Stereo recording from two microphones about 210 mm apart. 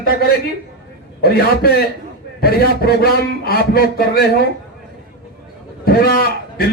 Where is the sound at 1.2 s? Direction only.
45° left (ahead or behind).